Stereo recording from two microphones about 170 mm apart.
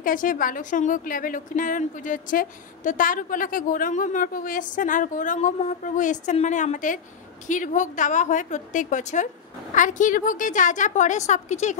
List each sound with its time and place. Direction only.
0.0 s a woman's voice: 55° left (ahead or behind)